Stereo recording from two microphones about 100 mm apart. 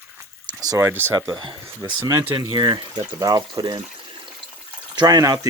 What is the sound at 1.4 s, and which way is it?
Speech, 50° right (ahead or behind).